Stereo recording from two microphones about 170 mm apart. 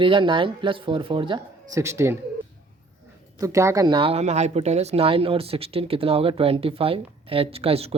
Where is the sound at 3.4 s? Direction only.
20° right (ahead or behind).